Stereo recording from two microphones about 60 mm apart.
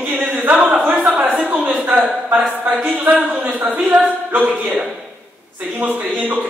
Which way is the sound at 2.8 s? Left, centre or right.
Right.